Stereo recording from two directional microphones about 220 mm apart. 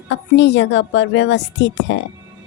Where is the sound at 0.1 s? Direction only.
55° left (ahead or behind).